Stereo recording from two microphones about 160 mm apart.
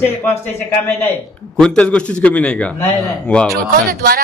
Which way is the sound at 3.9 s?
70° right (ahead or behind).